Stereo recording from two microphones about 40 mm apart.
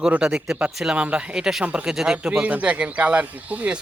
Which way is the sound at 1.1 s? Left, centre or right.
Right.